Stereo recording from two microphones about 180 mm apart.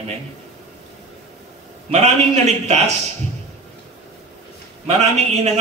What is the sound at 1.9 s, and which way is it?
A man's voice, 40° right (ahead or behind).